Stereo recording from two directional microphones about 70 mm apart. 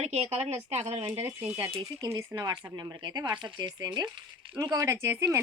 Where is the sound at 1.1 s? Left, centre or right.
Right.